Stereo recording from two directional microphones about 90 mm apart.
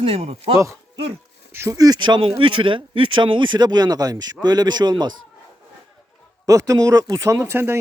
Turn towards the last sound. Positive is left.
turn(degrees=-30)  # may be behind; listen again after turning